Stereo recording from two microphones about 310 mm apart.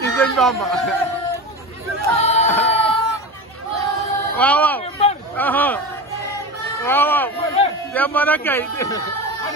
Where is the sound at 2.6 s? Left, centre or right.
Centre.